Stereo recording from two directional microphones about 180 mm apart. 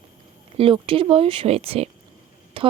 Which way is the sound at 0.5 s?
30° right (ahead or behind).